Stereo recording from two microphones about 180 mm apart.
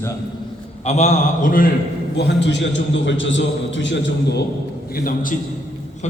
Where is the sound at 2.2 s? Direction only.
70° left (ahead or behind); by 4.4 s 90° left.